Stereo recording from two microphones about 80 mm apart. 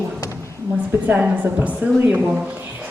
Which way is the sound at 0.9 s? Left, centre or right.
Right.